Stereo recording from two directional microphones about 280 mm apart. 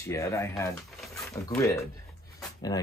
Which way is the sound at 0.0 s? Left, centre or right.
Centre.